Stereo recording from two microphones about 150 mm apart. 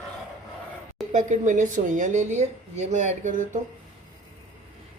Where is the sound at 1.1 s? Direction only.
55° right (ahead or behind).